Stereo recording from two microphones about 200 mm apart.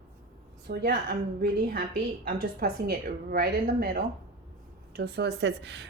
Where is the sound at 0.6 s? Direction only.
50° right (ahead or behind).